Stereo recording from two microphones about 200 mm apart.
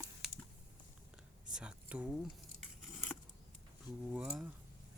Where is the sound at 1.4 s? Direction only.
5° right (ahead or behind).